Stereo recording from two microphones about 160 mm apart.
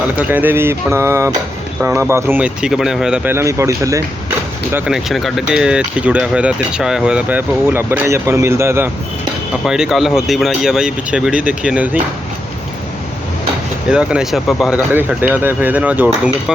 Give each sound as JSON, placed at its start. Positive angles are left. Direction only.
{"t": 0.2, "sound": "speech", "side_deg": -10}
{"t": 3.3, "sound": "a man's voice", "side_deg": -20}
{"t": 4.9, "sound": "speech", "side_deg": 0}
{"t": 9.6, "sound": "speech", "side_deg": -5}
{"t": 13.9, "sound": "speech", "side_deg": -5}
{"t": 14.9, "sound": "speech", "side_deg": -10}